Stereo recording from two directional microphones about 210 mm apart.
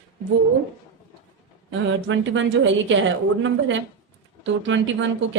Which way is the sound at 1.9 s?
65° right (ahead or behind).